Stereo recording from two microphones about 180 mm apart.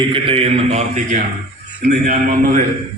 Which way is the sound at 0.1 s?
30° right (ahead or behind).